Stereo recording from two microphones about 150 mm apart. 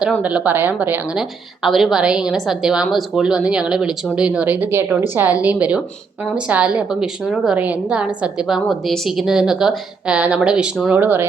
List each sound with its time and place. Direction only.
0.2 s a woman's voice: 10° right (ahead or behind)